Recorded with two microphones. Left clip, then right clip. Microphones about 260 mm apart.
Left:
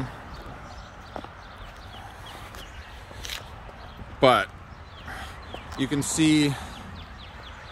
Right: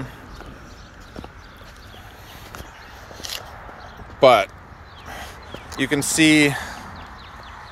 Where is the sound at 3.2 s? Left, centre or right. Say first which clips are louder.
Right 4 dB; right.